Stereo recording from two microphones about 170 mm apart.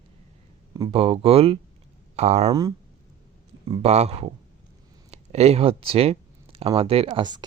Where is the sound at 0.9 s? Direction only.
35° right (ahead or behind).